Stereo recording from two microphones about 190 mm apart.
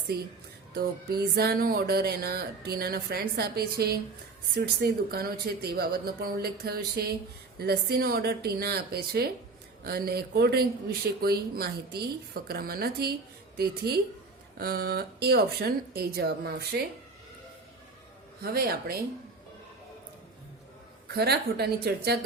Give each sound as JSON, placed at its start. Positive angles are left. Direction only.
{"t": 0.7, "sound": "speech", "side_deg": -55}
{"t": 18.4, "sound": "speech", "side_deg": -55}
{"t": 21.2, "sound": "speech", "side_deg": -60}